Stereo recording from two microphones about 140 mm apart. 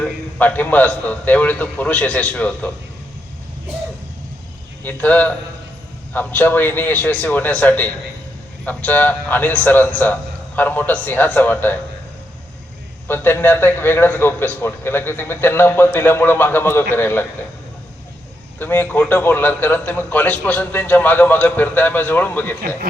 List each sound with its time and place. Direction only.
0.0 s a man's voice: 10° left (ahead or behind)
4.8 s a man's voice: 10° left (ahead or behind)
13.1 s a man's voice: 15° left (ahead or behind)
18.6 s a man's voice: 15° left (ahead or behind)